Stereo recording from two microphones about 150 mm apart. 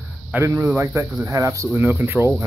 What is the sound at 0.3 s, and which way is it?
Speech, 15° right (ahead or behind).